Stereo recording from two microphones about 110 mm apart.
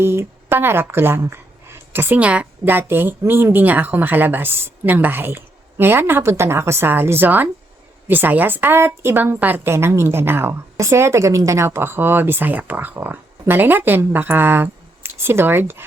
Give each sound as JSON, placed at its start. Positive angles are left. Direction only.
{"t": 0.0, "sound": "a woman's voice", "side_deg": -25}